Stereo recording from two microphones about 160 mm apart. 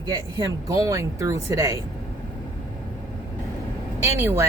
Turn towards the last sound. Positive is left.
turn(degrees=-15)  # may be behind; listen again after turning